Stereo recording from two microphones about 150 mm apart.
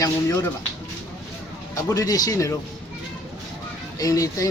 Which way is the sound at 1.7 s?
20° left (ahead or behind).